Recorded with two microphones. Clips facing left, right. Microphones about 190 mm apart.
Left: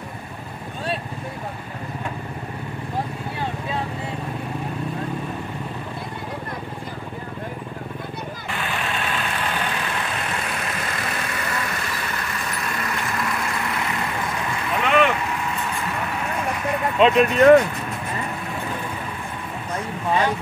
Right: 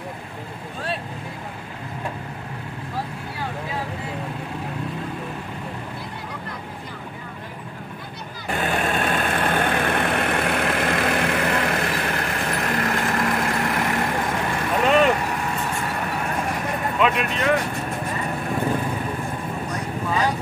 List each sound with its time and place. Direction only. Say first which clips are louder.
8.5 s vehicle: right 6 dB; 40° right (ahead or behind)
17.2 s speech: left 9 dB; 45° left (ahead or behind)